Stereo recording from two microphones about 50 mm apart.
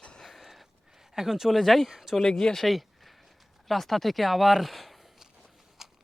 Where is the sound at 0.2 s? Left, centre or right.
Centre.